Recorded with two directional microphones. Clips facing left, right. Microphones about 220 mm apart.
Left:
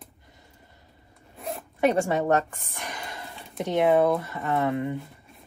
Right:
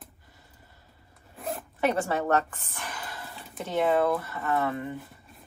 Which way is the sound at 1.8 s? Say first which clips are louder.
Left 4 dB; 15° left (ahead or behind).